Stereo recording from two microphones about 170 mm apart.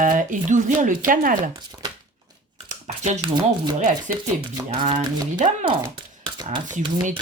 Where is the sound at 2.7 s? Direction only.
45° right (ahead or behind).